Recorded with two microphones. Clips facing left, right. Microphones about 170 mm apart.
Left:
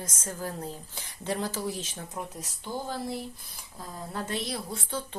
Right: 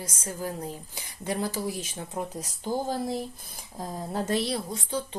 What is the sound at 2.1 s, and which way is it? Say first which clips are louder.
Speech: right 7 dB; 35° right (ahead or behind).